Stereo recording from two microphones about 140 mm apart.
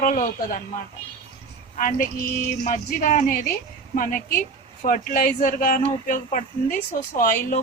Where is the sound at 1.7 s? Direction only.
80° left.